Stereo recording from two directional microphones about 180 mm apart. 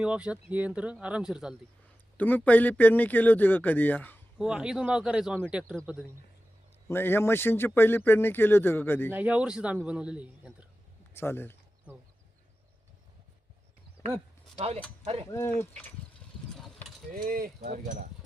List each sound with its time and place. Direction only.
0.0 s speech: 5° right (ahead or behind)
2.1 s speech: 10° left (ahead or behind)
4.4 s speech: 5° right (ahead or behind)
6.8 s speech: 10° left (ahead or behind)
9.1 s a man's voice: 5° right (ahead or behind)
11.1 s a sound: 10° left (ahead or behind)
14.0 s a sound: 15° left (ahead or behind)
14.5 s speech: 35° right (ahead or behind)
15.3 s speech: 15° left (ahead or behind)
17.1 s speech: 55° right (ahead or behind)